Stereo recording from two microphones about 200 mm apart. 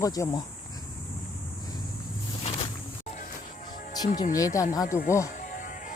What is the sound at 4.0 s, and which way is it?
Speech, 20° left (ahead or behind).